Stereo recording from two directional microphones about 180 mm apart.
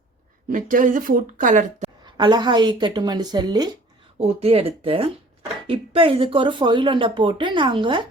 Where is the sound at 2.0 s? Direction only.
25° right (ahead or behind).